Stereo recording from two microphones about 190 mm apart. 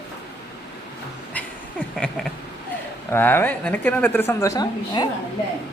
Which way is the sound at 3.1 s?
10° left (ahead or behind).